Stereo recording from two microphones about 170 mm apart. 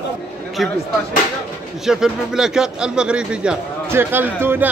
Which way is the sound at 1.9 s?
5° right (ahead or behind).